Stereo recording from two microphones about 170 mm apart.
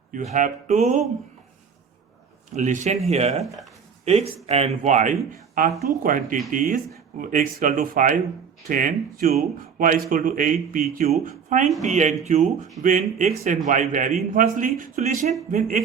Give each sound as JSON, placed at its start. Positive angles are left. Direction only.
{"t": 0.1, "sound": "speech", "side_deg": -50}
{"t": 2.6, "sound": "speech", "side_deg": -45}